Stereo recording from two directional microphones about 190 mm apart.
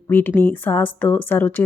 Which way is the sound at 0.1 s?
10° left (ahead or behind).